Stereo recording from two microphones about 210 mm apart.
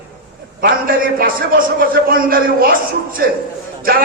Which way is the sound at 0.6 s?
45° right (ahead or behind).